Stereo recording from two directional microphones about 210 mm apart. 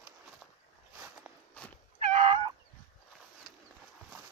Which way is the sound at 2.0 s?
30° right (ahead or behind).